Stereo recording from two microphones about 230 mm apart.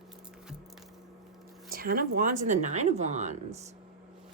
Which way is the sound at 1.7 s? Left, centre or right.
Right.